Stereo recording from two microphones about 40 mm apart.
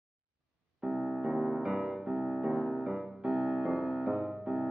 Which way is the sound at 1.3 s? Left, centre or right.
Centre.